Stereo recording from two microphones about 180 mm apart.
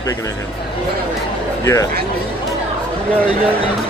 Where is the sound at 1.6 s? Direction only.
15° left (ahead or behind).